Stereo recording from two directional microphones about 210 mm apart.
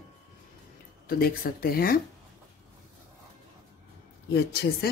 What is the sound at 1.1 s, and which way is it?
Speech, 45° left (ahead or behind).